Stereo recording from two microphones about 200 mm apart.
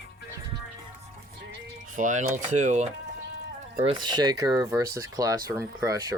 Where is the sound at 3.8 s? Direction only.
25° right (ahead or behind).